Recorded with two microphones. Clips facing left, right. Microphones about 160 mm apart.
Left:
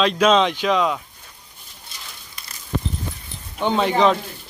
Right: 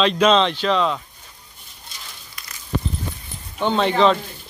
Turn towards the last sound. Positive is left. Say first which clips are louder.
# even
turn(degrees=10)  # may be behind; listen again after turning